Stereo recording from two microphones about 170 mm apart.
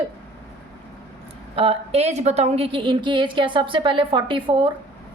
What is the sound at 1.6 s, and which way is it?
A woman's voice, 35° right (ahead or behind).